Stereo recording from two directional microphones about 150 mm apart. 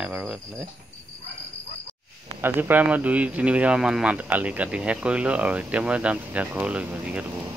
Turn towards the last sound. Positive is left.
turn(degrees=-10)  # may be behind; listen again after turning